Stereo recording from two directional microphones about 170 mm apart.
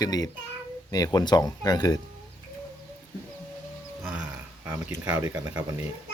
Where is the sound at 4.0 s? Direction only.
5° right (ahead or behind).